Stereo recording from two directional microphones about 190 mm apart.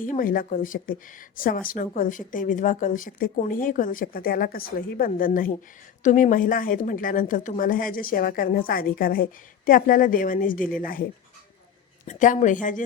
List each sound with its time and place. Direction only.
0.0 s a woman's voice: 45° left (ahead or behind)
12.0 s speech: 40° left (ahead or behind)